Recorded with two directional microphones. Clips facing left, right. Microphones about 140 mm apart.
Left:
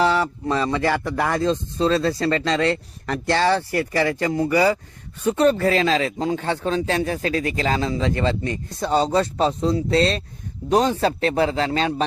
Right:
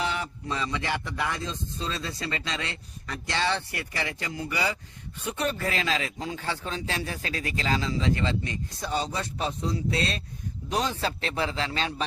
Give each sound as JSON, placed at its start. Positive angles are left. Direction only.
{"t": 0.0, "sound": "speech", "side_deg": 65}
{"t": 4.4, "sound": "a man's voice", "side_deg": 40}
{"t": 5.2, "sound": "a man's voice", "side_deg": 50}
{"t": 6.3, "sound": "speech", "side_deg": 50}
{"t": 10.7, "sound": "a man's voice", "side_deg": 40}